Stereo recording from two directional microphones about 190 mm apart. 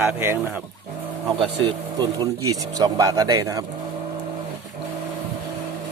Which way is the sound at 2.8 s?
15° right (ahead or behind).